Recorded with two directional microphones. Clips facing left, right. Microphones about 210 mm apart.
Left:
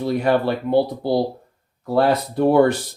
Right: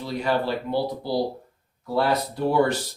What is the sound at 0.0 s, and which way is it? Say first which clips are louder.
Speech: left 6 dB; 55° left (ahead or behind).